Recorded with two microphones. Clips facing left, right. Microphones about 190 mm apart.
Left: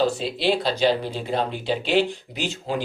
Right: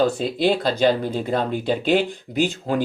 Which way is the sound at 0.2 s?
50° right (ahead or behind).